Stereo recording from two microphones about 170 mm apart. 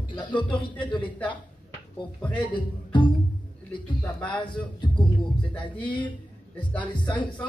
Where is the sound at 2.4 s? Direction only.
30° left (ahead or behind).